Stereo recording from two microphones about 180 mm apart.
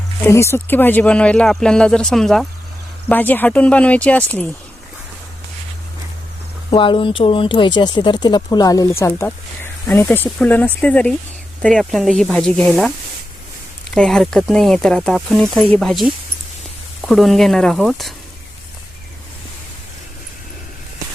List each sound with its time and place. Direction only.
0.2 s speech: 15° left (ahead or behind)
6.7 s speech: 30° left (ahead or behind); by 12.9 s centre (ahead or behind)
13.9 s speech: centre (ahead or behind)